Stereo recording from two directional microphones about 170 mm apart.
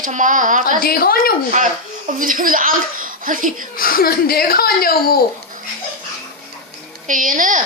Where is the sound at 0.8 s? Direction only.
60° left (ahead or behind).